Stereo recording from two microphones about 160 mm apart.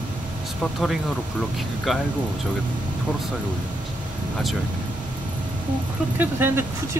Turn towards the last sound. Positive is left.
turn(degrees=-15)  # may be behind; listen again after turning